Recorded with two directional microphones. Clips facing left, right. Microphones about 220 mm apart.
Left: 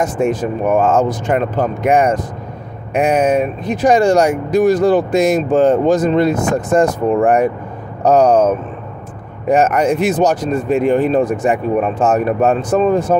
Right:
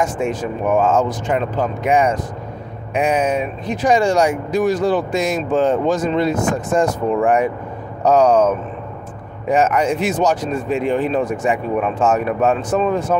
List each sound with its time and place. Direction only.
0.4 s speech: 45° left (ahead or behind)
9.6 s speech: 40° left (ahead or behind)
10.7 s speech: 50° left (ahead or behind)
12.0 s speech: 40° left (ahead or behind)